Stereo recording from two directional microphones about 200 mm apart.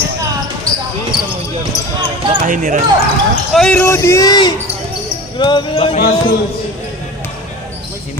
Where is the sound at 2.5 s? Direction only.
40° right (ahead or behind).